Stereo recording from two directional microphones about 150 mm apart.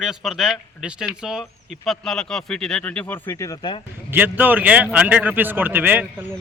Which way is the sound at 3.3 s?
20° left (ahead or behind).